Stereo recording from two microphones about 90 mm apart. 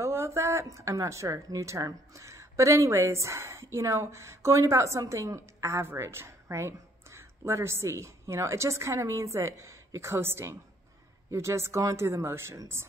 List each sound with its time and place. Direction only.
0.0 s a woman's voice: 30° right (ahead or behind)